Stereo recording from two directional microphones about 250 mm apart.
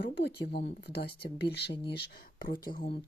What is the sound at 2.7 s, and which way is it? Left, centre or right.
Speech, left.